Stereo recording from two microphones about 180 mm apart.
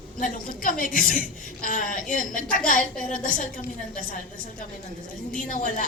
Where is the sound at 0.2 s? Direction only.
50° left (ahead or behind).